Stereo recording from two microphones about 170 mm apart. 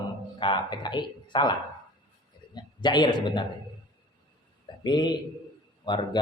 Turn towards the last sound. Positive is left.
turn(degrees=25)  # may be behind; listen again after turning